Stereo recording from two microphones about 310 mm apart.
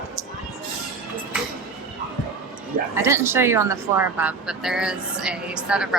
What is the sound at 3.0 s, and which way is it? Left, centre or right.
Speech, centre.